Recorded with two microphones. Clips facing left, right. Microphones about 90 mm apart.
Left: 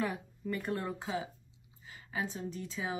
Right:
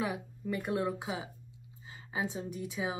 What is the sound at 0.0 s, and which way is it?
Speech, 10° right (ahead or behind).